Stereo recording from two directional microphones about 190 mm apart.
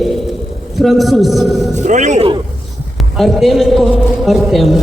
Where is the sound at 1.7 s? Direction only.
40° right (ahead or behind).